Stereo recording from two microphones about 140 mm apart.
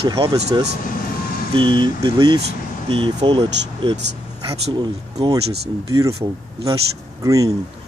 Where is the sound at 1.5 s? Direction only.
35° right (ahead or behind).